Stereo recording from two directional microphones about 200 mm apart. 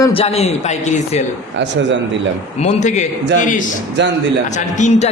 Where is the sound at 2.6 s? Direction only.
35° left (ahead or behind).